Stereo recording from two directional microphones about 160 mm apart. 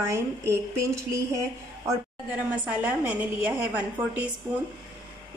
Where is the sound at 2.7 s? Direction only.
10° right (ahead or behind).